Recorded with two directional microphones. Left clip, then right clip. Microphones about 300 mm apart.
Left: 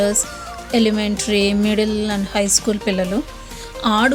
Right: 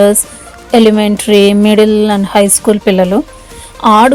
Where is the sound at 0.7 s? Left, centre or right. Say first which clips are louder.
Right 11 dB; left.